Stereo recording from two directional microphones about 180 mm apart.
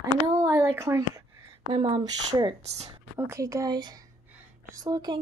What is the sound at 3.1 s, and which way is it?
Speech, 15° right (ahead or behind).